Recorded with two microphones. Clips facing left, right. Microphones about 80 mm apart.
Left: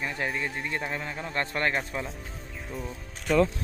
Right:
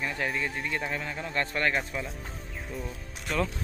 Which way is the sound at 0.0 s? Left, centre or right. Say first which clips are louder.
Even; centre.